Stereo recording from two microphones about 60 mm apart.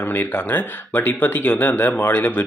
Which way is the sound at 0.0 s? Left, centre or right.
Left.